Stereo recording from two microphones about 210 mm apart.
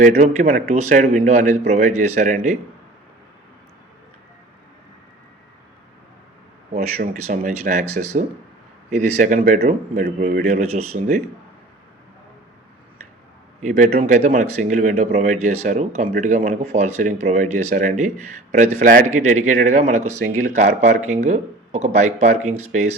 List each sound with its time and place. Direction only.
0.0 s speech: 35° right (ahead or behind)
6.9 s speech: 45° right (ahead or behind)
10.4 s speech: 30° right (ahead or behind)
13.6 s speech: 35° right (ahead or behind)